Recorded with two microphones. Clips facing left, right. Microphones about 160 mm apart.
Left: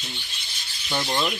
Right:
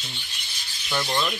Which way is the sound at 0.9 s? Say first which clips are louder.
Even; 20° left (ahead or behind).